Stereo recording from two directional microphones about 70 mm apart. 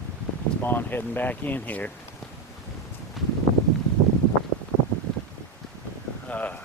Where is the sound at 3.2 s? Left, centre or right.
Centre.